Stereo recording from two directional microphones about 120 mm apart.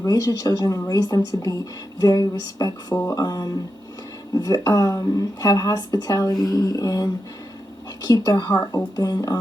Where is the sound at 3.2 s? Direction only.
30° left (ahead or behind).